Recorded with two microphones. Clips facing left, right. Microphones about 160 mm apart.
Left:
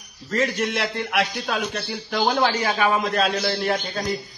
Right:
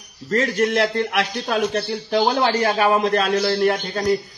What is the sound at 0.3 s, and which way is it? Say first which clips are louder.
Speech: right 4 dB; 45° right (ahead or behind).